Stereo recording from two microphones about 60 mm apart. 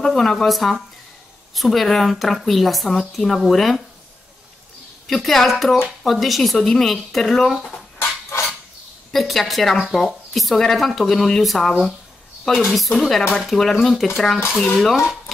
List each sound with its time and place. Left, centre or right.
0.0 s speech: centre
5.0 s speech: centre
8.0 s a sound: left
9.1 s speech: centre